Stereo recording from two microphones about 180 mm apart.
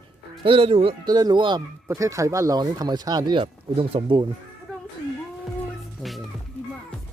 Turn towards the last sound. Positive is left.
turn(degrees=0)  # may be behind; listen again after turning